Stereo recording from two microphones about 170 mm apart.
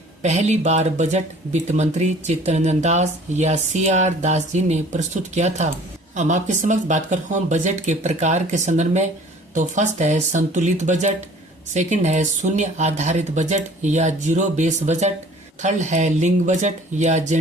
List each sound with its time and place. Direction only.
0.2 s speech: 40° right (ahead or behind)